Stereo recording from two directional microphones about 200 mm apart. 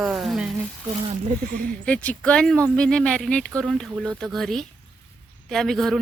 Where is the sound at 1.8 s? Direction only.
5° left (ahead or behind).